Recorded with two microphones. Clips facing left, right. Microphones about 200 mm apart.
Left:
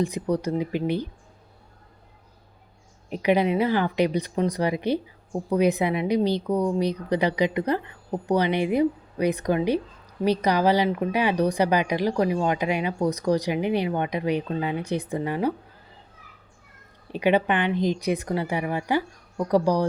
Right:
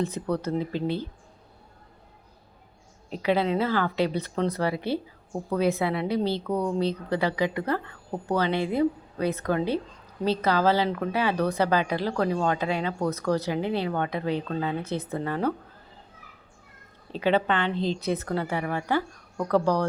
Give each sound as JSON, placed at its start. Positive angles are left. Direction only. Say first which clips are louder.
{"t": 0.0, "sound": "speech", "louder": "left 3 dB", "side_deg": 15}
{"t": 3.1, "sound": "speech", "louder": "left 3 dB", "side_deg": 15}
{"t": 17.1, "sound": "speech", "louder": "left 2 dB", "side_deg": 15}